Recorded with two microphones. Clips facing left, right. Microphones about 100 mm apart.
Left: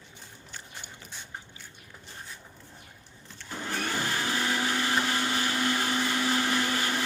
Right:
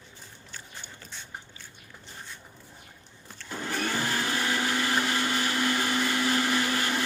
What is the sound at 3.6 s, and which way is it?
Vacuum cleaner, centre (ahead or behind).